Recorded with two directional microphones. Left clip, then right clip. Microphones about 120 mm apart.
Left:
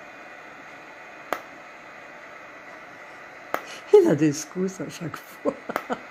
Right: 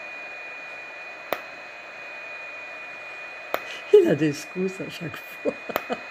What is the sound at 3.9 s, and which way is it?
Speech, 10° right (ahead or behind).